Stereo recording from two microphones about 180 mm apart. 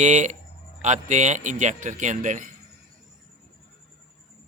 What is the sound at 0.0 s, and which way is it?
A man's voice, 40° right (ahead or behind).